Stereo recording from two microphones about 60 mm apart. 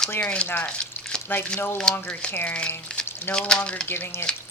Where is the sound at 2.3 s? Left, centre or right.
Left.